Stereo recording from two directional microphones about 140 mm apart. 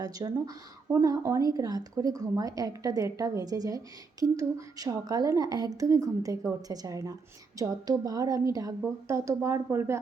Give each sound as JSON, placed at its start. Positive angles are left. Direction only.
{"t": 0.0, "sound": "a woman's voice", "side_deg": -25}